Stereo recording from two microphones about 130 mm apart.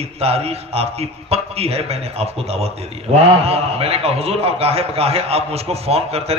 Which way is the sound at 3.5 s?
50° right (ahead or behind).